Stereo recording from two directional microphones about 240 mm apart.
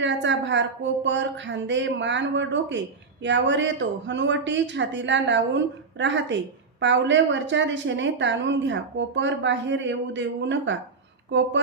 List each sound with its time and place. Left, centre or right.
0.0 s a woman's voice: right